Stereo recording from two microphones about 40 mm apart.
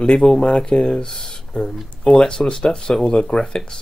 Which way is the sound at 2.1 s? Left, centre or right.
Centre.